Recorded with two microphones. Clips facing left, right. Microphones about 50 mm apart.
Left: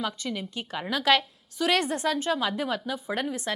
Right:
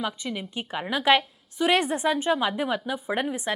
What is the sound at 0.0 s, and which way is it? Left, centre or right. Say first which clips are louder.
A woman's voice: right 1 dB; centre.